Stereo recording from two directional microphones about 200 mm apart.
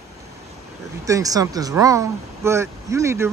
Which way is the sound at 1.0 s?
15° right (ahead or behind).